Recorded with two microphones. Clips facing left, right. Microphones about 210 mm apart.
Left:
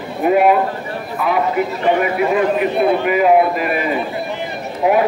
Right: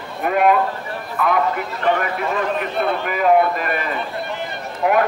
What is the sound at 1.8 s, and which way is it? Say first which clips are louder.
A man's voice: left 3 dB; 10° left (ahead or behind).